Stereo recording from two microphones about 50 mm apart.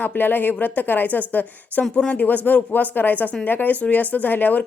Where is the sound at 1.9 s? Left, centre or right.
Centre.